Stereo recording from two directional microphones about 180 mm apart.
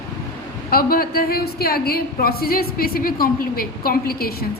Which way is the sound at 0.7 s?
55° left (ahead or behind).